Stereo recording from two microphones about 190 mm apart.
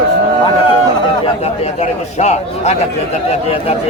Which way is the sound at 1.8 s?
35° left (ahead or behind).